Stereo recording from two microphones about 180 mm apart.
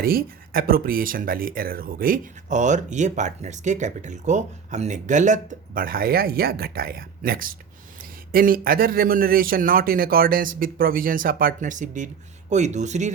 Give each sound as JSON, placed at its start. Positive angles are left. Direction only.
{"t": 0.0, "sound": "speech", "side_deg": -55}